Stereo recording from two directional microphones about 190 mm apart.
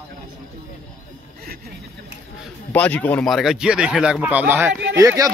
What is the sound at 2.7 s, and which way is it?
Speech, 10° left (ahead or behind).